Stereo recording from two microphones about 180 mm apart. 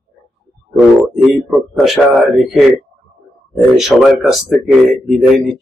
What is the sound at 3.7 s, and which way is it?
Speech, centre (ahead or behind).